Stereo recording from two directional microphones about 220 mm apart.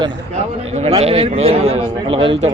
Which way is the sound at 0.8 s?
30° right (ahead or behind).